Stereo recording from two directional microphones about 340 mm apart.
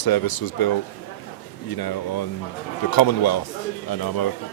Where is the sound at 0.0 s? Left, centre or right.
Left.